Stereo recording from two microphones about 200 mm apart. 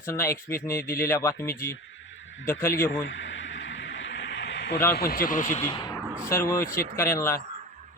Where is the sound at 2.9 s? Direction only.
70° left (ahead or behind).